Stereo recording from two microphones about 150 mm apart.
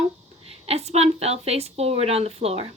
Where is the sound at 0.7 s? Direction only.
45° right (ahead or behind).